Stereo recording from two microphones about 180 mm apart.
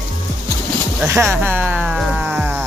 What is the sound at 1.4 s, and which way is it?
Speech, 10° right (ahead or behind).